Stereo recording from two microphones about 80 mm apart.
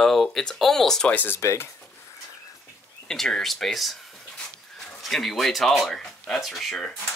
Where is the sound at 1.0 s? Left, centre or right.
Left.